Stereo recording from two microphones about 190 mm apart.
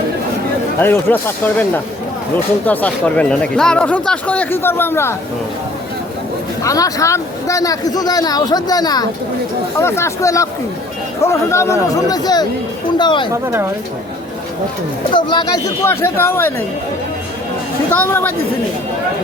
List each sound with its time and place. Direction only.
0.8 s speech: 10° left (ahead or behind)
6.6 s speech: 15° left (ahead or behind)
13.3 s speech: 10° right (ahead or behind)
15.1 s speech: 25° left (ahead or behind)
17.9 s speech: 10° left (ahead or behind)